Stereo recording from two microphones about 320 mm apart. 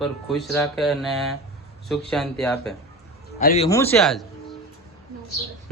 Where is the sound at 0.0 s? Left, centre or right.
Centre.